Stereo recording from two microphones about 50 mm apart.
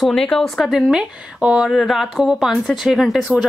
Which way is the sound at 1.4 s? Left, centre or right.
Right.